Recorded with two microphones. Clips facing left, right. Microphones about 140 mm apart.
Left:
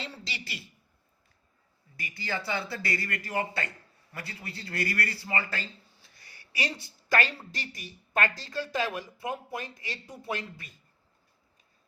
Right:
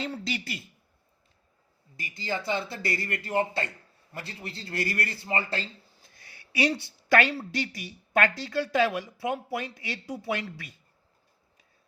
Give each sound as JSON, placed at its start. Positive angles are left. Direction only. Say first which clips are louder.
{"t": 0.0, "sound": "speech", "louder": "right 8 dB", "side_deg": -50}
{"t": 2.0, "sound": "speech", "louder": "right 2 dB", "side_deg": -20}
{"t": 6.5, "sound": "a woman's voice", "louder": "right 8 dB", "side_deg": -70}